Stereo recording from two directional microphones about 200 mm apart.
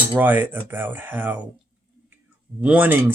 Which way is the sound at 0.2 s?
10° right (ahead or behind).